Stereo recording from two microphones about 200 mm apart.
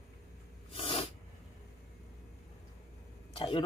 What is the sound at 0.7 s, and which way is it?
Sneeze, 30° left (ahead or behind).